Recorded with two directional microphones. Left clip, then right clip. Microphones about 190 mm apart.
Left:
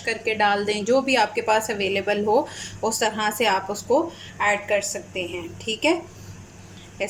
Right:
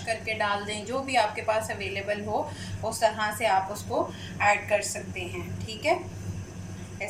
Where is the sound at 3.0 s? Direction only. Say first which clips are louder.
Left 2 dB; 55° left (ahead or behind).